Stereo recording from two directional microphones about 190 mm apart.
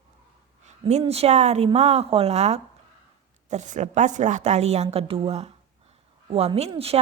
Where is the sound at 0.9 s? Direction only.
35° right (ahead or behind).